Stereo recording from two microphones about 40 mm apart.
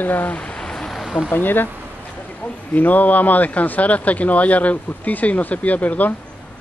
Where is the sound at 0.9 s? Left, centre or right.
Centre.